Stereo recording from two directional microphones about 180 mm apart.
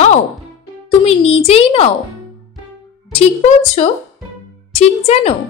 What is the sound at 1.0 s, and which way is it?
Speech, 35° left (ahead or behind).